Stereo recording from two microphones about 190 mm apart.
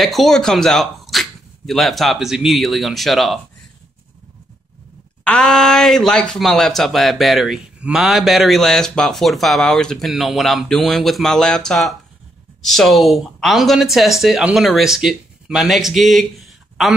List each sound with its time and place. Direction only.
0.0 s speech: centre (ahead or behind)
5.2 s speech: 5° left (ahead or behind)